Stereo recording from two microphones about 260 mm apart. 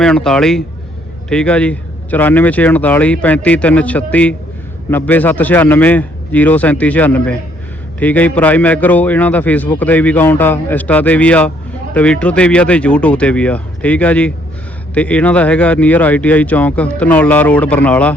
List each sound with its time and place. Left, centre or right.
0.0 s a man's voice: centre